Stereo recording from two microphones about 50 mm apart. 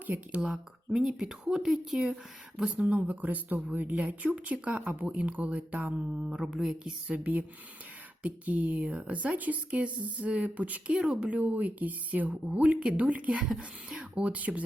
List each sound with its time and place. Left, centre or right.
0.3 s speech: right
2.6 s speech: right
7.1 s speech: right; by 14.3 s centre
14.3 s speech: right